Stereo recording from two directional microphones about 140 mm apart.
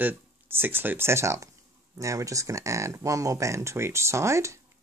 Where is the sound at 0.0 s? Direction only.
15° right (ahead or behind).